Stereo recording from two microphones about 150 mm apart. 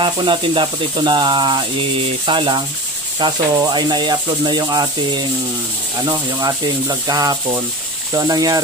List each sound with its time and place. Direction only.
0.0 s speech: 30° right (ahead or behind)